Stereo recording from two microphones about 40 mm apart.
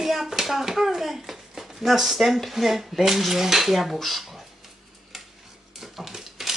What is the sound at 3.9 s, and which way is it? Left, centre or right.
Speech, centre.